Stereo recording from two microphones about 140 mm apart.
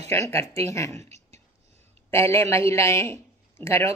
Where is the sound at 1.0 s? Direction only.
55° right (ahead or behind).